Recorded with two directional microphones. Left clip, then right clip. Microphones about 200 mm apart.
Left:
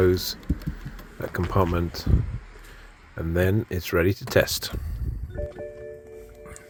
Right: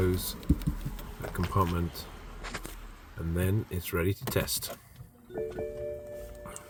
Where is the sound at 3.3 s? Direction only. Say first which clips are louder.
Left 10 dB; 35° left (ahead or behind).